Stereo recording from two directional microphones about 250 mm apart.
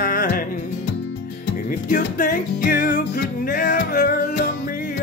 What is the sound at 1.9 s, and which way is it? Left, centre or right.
Music, left.